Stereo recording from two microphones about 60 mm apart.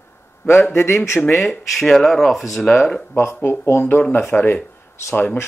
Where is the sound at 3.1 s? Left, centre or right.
Left.